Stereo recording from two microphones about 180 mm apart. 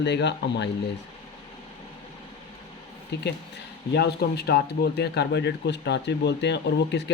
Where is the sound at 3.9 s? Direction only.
65° left (ahead or behind).